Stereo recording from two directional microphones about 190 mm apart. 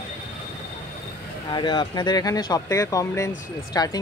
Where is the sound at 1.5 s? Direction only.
25° left (ahead or behind).